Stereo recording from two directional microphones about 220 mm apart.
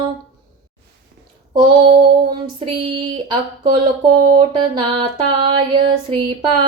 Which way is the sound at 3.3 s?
20° right (ahead or behind).